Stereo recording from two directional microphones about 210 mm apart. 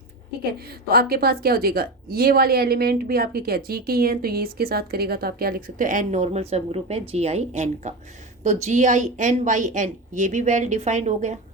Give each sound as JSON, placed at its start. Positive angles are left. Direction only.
{"t": 0.7, "sound": "a woman's voice", "side_deg": -45}